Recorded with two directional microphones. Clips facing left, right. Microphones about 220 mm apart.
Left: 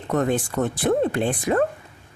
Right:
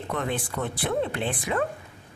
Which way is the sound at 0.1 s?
45° left (ahead or behind).